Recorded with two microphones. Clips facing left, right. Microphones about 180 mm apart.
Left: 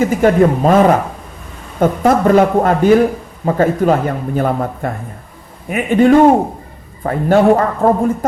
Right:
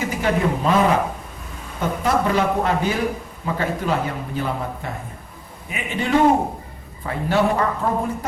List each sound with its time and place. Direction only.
0.0 s a man's voice: 50° left (ahead or behind)